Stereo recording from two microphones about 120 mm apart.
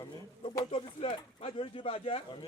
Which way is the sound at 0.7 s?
55° left (ahead or behind).